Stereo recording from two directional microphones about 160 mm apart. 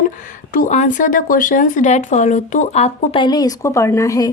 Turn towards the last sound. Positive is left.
turn(degrees=20)  # may be behind; listen again after turning